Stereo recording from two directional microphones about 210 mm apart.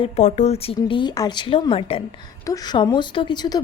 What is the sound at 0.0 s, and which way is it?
A woman's voice, 35° left (ahead or behind).